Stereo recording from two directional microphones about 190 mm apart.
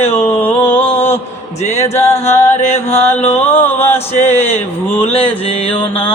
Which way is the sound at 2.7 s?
35° left (ahead or behind).